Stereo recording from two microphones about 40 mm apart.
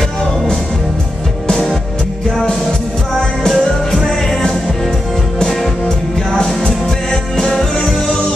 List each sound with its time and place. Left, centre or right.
3.2 s music: centre
5.9 s music: centre